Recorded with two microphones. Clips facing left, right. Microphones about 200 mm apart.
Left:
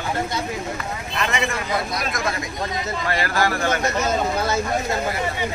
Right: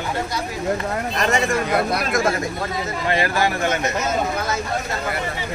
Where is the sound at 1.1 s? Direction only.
40° right (ahead or behind).